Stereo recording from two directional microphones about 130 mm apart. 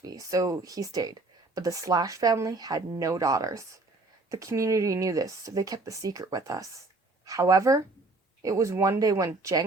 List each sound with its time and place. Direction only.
0.0 s speech: 25° right (ahead or behind)